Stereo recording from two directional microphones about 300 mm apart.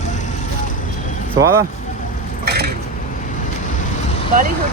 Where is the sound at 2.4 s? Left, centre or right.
Right.